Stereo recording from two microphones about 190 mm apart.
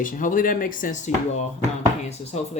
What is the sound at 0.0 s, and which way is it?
Speech, 45° left (ahead or behind).